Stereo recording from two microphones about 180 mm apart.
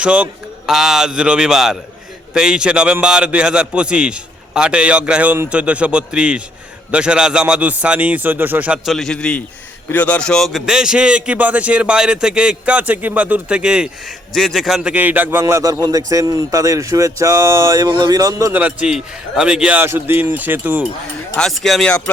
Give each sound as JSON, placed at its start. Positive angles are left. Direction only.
{"t": 0.0, "sound": "a man's voice", "side_deg": -5}
{"t": 21.3, "sound": "a man's voice", "side_deg": 5}